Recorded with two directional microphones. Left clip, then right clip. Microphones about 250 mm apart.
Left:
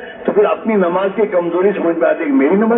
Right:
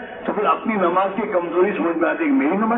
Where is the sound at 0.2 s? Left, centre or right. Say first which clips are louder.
Left 6 dB; left.